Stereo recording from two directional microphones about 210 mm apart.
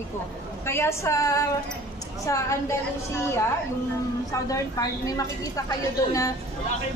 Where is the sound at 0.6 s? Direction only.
10° left (ahead or behind).